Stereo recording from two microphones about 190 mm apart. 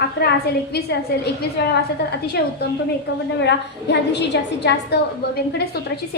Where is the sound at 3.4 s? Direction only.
65° left (ahead or behind).